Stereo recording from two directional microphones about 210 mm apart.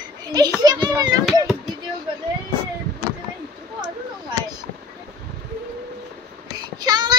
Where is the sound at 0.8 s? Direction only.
20° right (ahead or behind).